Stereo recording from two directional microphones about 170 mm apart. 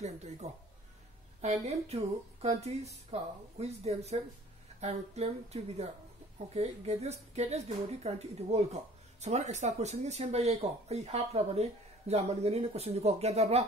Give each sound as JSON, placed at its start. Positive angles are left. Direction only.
{"t": 0.0, "sound": "speech", "side_deg": -40}